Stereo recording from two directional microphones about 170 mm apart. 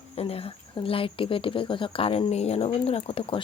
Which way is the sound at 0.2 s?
35° left (ahead or behind).